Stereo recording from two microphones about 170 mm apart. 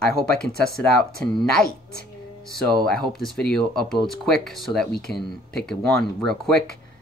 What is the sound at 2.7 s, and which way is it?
Speech, 5° left (ahead or behind).